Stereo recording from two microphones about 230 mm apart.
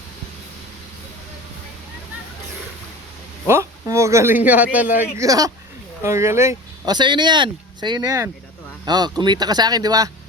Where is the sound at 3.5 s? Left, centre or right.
Centre.